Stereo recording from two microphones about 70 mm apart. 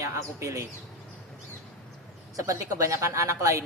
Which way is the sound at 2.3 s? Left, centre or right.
Right.